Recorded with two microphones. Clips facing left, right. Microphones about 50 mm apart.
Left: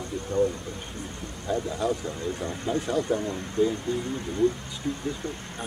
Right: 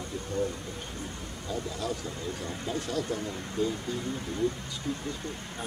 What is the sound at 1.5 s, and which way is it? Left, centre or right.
Speech, centre.